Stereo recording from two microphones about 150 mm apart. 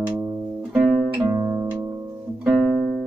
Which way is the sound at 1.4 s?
15° right (ahead or behind).